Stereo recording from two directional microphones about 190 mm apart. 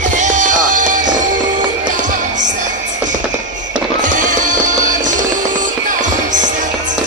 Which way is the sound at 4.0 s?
45° right (ahead or behind).